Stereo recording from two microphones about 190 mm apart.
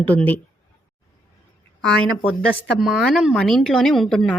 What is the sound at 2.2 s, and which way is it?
Speech, 5° right (ahead or behind).